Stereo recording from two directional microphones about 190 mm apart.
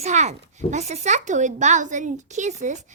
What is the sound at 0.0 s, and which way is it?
A woman's voice, 35° right (ahead or behind).